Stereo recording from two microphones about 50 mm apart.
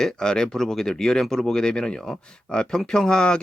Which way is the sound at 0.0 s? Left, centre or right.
Centre.